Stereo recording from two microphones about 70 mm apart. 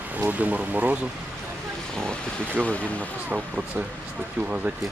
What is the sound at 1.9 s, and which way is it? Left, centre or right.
Speech, centre.